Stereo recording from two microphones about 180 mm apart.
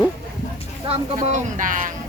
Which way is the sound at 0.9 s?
40° right (ahead or behind).